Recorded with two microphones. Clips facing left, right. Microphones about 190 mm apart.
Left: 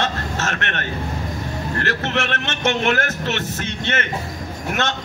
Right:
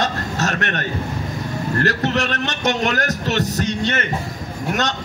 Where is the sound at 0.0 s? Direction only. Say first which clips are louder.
Right 2 dB; 40° right (ahead or behind).